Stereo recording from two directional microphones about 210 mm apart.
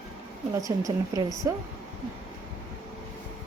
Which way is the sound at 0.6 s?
15° right (ahead or behind).